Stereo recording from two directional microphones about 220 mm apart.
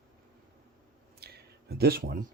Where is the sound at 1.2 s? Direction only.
45° right (ahead or behind).